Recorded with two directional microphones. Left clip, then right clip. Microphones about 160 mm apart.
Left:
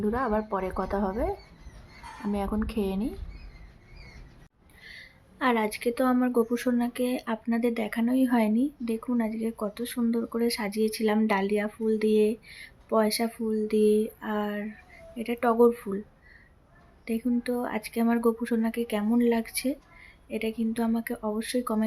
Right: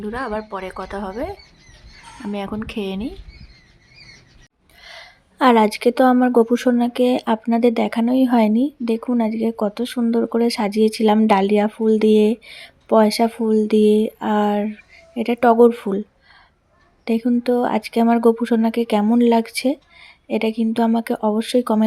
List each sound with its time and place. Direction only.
0.0 s speech: 10° right (ahead or behind)
4.8 s a woman's voice: 40° right (ahead or behind)
17.1 s speech: 30° right (ahead or behind)